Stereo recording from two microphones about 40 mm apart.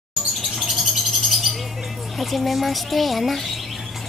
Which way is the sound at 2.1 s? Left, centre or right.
Centre.